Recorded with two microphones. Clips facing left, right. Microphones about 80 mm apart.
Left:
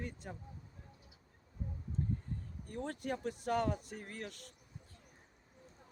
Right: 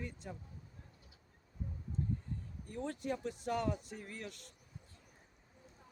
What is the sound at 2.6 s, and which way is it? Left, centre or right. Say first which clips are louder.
Speech: even; left.